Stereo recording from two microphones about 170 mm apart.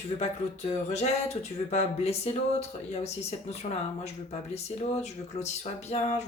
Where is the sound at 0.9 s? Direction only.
40° left (ahead or behind).